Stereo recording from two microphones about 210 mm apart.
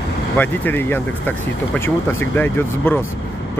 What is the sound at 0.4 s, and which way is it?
Speech, 10° left (ahead or behind).